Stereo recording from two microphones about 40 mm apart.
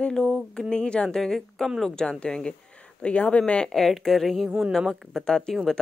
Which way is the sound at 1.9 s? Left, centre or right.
Left.